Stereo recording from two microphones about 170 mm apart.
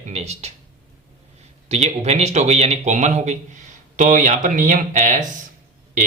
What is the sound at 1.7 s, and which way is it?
Speech, 40° right (ahead or behind).